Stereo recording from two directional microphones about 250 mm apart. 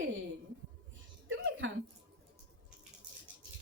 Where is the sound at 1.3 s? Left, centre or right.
Right.